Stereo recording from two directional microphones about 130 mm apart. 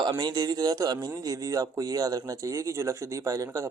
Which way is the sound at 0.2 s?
30° right (ahead or behind).